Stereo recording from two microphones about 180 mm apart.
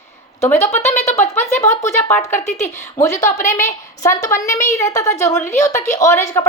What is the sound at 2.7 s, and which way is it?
A woman's voice, 15° left (ahead or behind).